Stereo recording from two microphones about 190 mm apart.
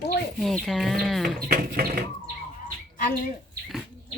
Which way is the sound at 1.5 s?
45° right (ahead or behind).